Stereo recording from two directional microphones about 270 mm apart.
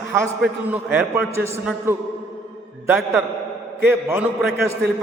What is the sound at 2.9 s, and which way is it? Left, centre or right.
A man's voice, centre.